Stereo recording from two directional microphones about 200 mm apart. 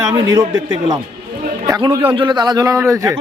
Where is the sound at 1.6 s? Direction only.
15° right (ahead or behind).